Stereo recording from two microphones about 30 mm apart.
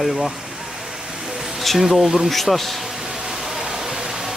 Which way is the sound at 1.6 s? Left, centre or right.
Centre.